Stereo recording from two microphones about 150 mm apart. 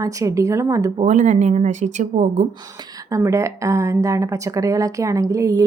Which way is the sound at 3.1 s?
20° right (ahead or behind).